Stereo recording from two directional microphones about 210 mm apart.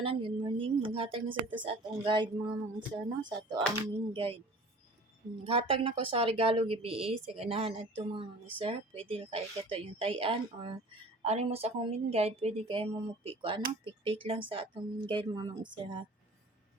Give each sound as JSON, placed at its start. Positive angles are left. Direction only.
{"t": 0.0, "sound": "a woman's voice", "side_deg": -25}
{"t": 5.4, "sound": "a woman's voice", "side_deg": -25}